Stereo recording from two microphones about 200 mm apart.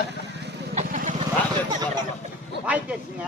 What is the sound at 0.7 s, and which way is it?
Vehicle, 40° right (ahead or behind).